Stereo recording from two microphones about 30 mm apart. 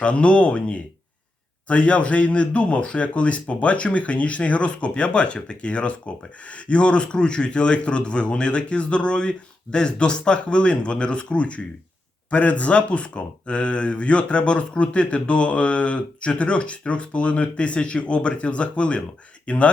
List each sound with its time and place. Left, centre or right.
0.0 s speech: left